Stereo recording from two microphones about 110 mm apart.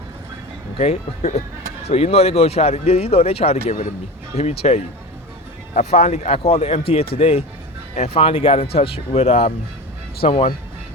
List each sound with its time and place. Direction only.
0.8 s speech: 85° left
1.9 s speech: 65° left (ahead or behind)